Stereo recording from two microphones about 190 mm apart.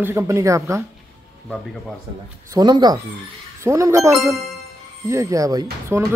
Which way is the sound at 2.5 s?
20° right (ahead or behind).